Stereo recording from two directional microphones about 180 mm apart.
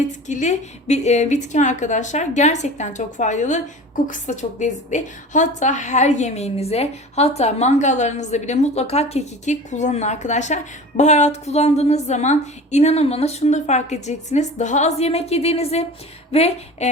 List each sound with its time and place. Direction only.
0.3 s a woman's voice: 40° left (ahead or behind)